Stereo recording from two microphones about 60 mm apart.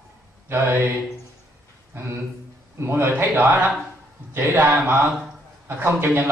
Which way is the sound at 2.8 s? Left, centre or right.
Right.